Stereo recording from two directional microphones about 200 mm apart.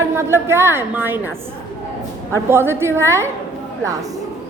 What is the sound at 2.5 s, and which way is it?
Speech, 10° right (ahead or behind).